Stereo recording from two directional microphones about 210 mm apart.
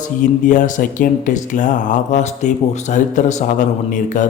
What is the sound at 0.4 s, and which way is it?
Speech, 35° left (ahead or behind).